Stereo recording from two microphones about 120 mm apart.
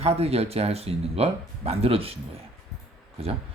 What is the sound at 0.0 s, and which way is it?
Speech, 60° right (ahead or behind).